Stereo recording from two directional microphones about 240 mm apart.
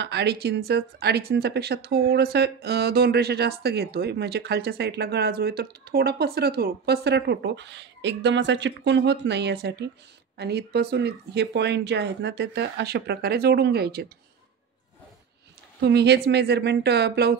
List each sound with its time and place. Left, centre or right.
0.0 s speech: right
15.8 s speech: right